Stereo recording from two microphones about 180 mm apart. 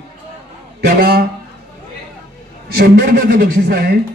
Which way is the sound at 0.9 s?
60° right (ahead or behind).